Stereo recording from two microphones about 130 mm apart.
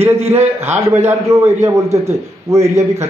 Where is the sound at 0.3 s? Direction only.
55° right (ahead or behind).